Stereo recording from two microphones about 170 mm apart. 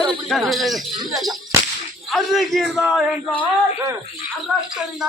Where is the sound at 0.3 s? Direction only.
Centre (ahead or behind).